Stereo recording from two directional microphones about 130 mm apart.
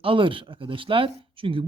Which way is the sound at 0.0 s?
40° right (ahead or behind).